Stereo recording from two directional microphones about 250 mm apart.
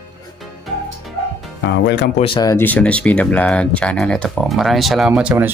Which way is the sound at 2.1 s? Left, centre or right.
Centre.